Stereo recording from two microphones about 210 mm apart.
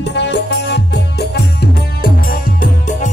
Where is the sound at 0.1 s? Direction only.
55° left (ahead or behind).